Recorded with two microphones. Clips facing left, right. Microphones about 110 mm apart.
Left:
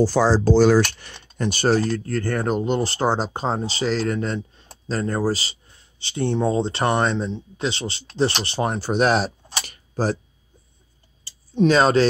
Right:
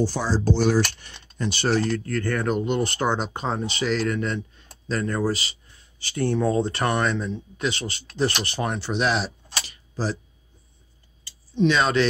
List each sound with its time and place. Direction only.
0.0 s speech: 90° left
0.9 s cutlery: 75° left (ahead or behind)
1.5 s speech: 45° left (ahead or behind)
9.7 s a sound: 55° left (ahead or behind)
11.5 s speech: 40° left (ahead or behind)